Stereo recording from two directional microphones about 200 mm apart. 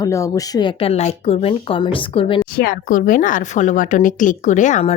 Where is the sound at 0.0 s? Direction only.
15° left (ahead or behind).